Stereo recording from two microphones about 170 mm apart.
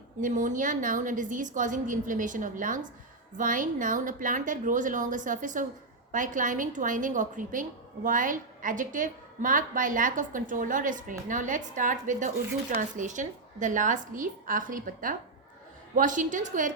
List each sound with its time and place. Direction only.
0.2 s a woman's voice: 50° right (ahead or behind)